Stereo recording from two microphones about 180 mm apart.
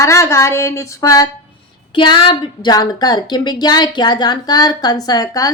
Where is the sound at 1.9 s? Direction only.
25° left (ahead or behind).